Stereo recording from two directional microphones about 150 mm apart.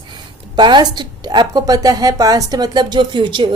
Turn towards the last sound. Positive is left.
turn(degrees=-30)  # may be behind; listen again after turning